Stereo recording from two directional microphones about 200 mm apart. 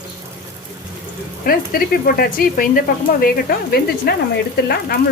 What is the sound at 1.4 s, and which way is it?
Speech, 45° left (ahead or behind).